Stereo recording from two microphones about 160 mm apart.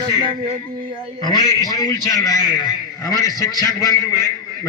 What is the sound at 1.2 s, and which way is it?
A man's voice, 25° left (ahead or behind).